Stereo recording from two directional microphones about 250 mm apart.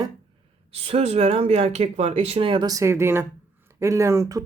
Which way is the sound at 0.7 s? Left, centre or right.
Right.